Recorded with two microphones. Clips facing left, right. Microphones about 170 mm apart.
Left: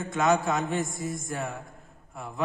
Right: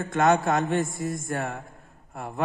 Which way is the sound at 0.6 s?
Centre (ahead or behind).